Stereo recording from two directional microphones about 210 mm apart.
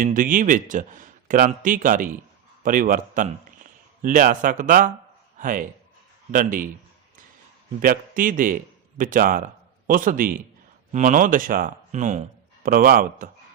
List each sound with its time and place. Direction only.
0.0 s speech: 40° right (ahead or behind)
7.8 s a man's voice: 40° right (ahead or behind)